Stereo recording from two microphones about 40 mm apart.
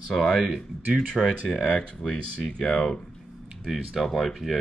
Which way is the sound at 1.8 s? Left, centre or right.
Left.